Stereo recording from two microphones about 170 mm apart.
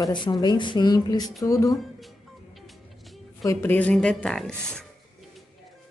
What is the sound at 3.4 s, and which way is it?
Speech, 10° left (ahead or behind).